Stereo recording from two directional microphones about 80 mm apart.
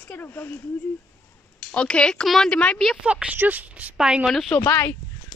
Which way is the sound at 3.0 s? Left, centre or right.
Centre.